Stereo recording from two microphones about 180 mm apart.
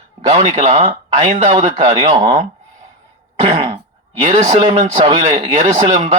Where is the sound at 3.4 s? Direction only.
30° right (ahead or behind).